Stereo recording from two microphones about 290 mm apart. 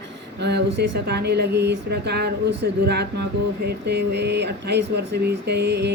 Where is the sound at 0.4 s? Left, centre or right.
Right.